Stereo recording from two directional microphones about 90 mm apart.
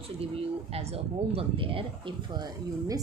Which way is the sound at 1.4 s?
90° right.